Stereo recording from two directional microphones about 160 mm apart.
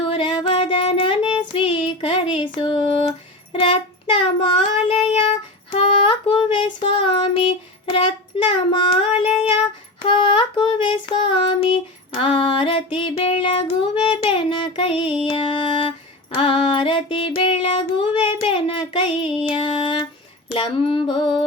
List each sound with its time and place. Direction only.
0.0 s child singing: 30° left (ahead or behind)
14.0 s music: 30° left (ahead or behind)
16.3 s child singing: 35° left (ahead or behind)
20.5 s music: 35° left (ahead or behind)